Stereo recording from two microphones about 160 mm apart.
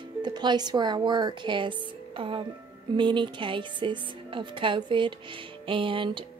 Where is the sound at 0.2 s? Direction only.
25° right (ahead or behind).